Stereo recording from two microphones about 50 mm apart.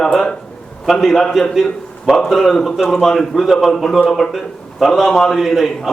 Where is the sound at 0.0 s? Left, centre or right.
Centre.